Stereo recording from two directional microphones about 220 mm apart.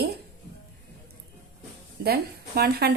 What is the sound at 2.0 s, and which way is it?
Speech, 45° right (ahead or behind).